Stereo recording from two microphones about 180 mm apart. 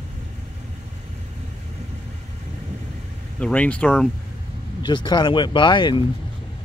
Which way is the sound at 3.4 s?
5° left (ahead or behind).